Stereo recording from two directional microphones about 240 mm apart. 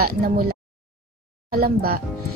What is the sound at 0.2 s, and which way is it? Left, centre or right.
A woman's voice, right.